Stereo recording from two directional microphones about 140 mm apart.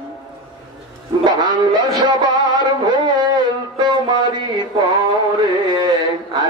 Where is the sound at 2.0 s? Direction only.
30° right (ahead or behind).